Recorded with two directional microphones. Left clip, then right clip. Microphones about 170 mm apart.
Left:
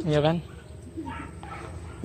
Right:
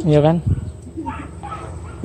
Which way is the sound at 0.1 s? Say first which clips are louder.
Right 9 dB; 30° right (ahead or behind).